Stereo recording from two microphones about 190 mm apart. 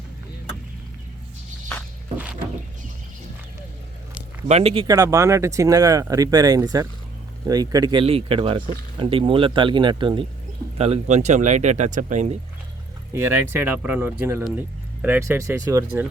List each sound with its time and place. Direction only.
4.4 s speech: 35° right (ahead or behind)
13.1 s speech: 10° right (ahead or behind)